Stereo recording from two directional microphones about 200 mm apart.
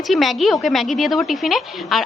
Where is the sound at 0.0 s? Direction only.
Centre (ahead or behind).